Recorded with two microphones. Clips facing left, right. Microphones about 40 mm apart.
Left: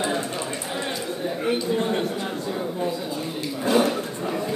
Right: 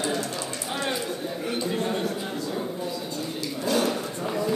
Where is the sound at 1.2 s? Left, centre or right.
Left.